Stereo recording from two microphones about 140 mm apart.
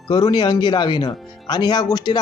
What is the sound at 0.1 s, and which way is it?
Speech, 30° left (ahead or behind).